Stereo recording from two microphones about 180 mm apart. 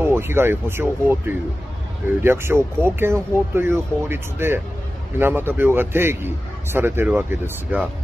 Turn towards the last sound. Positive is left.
turn(degrees=-10)  # may be behind; listen again after turning